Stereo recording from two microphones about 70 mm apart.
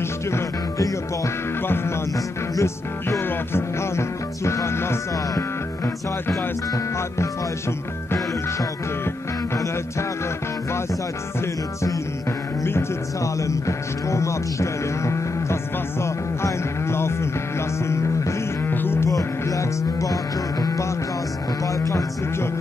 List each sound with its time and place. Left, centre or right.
0.3 s music: left
2.5 s music: left
8.1 s music: left
13.2 s music: left
19.0 s music: left